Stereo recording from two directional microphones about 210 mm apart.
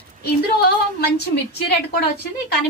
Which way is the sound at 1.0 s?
50° left (ahead or behind).